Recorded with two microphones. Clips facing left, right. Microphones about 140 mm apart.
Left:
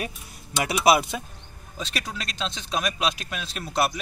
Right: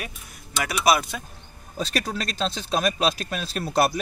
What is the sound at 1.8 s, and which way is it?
Speech, 40° right (ahead or behind).